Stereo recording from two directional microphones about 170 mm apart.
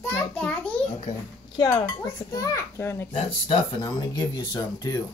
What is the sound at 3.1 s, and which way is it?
Speech, 35° left (ahead or behind).